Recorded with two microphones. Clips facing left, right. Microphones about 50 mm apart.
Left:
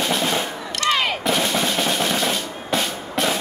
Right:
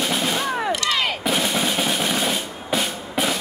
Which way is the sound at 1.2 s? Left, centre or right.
Centre.